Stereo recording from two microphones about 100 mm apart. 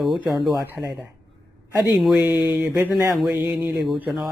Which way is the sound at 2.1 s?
15° right (ahead or behind).